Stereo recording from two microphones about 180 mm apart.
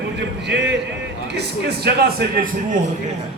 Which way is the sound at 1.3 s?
65° right (ahead or behind).